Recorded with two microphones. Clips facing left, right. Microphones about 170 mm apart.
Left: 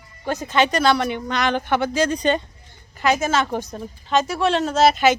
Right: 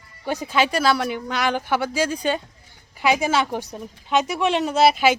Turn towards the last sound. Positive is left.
turn(degrees=-10)  # may be behind; listen again after turning